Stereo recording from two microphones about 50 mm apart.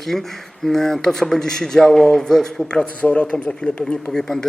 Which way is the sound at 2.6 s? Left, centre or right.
Centre.